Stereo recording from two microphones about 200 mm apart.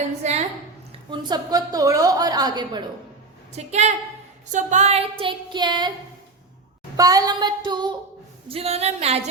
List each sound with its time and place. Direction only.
0.2 s a sound: 35° right (ahead or behind)
1.1 s a woman's voice: 20° right (ahead or behind)
3.5 s a woman's voice: 35° right (ahead or behind)
6.9 s a woman's voice: 20° right (ahead or behind)